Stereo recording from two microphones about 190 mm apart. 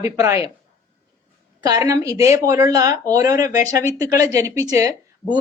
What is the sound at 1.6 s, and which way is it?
Speech, 20° right (ahead or behind).